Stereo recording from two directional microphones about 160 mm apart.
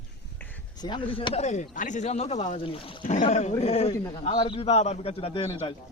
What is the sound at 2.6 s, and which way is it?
Speech, 35° left (ahead or behind).